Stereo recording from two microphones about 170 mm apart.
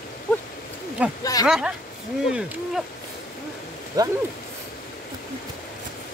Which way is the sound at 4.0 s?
20° right (ahead or behind).